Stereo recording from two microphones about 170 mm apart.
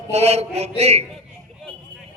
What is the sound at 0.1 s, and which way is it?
Speech, 40° right (ahead or behind).